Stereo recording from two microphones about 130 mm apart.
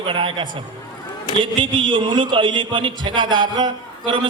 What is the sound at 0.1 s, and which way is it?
Speech, 40° right (ahead or behind).